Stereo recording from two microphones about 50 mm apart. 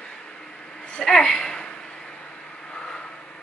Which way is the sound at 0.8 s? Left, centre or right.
Centre.